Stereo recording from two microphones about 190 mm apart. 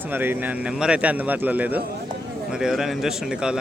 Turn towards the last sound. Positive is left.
turn(degrees=-5)  # may be behind; listen again after turning